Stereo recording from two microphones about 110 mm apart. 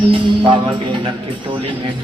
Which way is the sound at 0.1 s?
50° right (ahead or behind).